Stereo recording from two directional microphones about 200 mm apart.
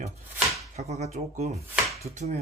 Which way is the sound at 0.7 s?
30° right (ahead or behind).